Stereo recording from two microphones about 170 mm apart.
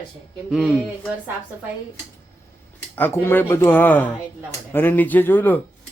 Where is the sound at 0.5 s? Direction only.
5° right (ahead or behind).